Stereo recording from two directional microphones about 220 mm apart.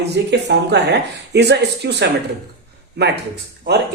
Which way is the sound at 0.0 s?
50° right (ahead or behind).